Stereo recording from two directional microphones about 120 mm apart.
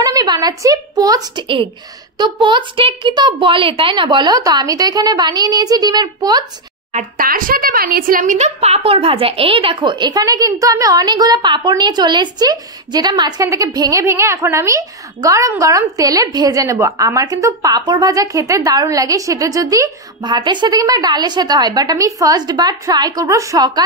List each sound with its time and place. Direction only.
0.0 s a woman's voice: 30° right (ahead or behind)
8.2 s a woman's voice: 80° right; by 23.8 s 30° right (ahead or behind)